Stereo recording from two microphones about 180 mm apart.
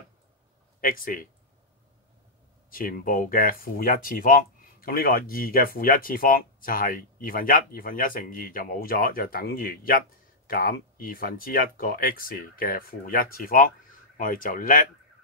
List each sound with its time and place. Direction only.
0.7 s speech: 50° left (ahead or behind)
2.7 s speech: 50° left (ahead or behind)